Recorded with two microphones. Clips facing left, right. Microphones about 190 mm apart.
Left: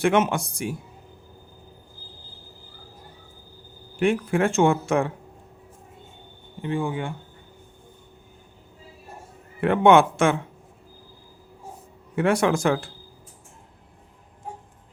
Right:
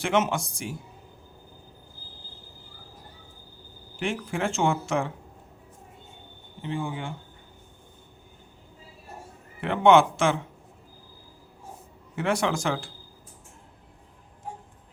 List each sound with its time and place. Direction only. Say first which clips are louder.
0.0 s speech: left 4 dB; 55° left (ahead or behind)
4.0 s speech: left 7 dB; 55° left (ahead or behind)
6.6 s speech: left 5 dB; 55° left (ahead or behind)
9.6 s speech: left 2 dB; 55° left (ahead or behind)
12.1 s speech: left 5 dB; 55° left (ahead or behind)